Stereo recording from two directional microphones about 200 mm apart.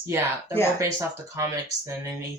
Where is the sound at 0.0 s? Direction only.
15° right (ahead or behind).